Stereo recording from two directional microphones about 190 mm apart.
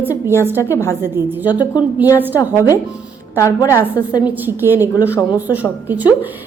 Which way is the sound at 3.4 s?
15° left (ahead or behind).